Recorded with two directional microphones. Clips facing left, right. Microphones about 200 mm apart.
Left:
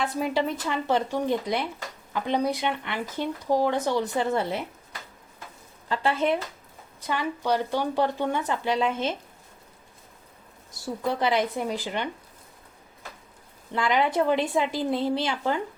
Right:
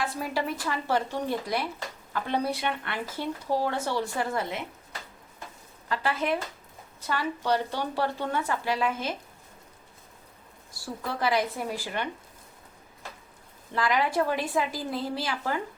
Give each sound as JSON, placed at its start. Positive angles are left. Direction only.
{"t": 0.1, "sound": "a woman's voice", "side_deg": 20}
{"t": 5.9, "sound": "a woman's voice", "side_deg": 25}
{"t": 7.1, "sound": "speech", "side_deg": 15}
{"t": 10.7, "sound": "a woman's voice", "side_deg": 20}
{"t": 13.7, "sound": "a woman's voice", "side_deg": 25}